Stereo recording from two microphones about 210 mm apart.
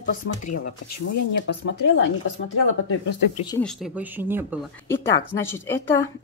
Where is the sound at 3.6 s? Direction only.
5° right (ahead or behind).